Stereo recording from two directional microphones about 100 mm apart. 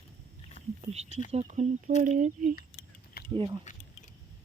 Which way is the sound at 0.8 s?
90° right.